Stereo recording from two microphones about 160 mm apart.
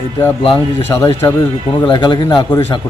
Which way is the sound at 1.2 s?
15° left (ahead or behind).